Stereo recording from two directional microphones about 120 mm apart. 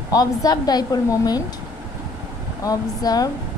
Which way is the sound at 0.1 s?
30° left (ahead or behind).